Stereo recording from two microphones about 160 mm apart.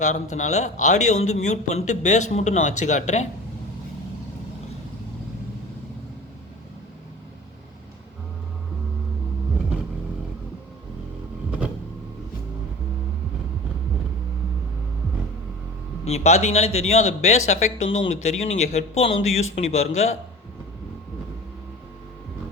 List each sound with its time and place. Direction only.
0.0 s speech: 50° left (ahead or behind)
16.0 s speech: 45° left (ahead or behind)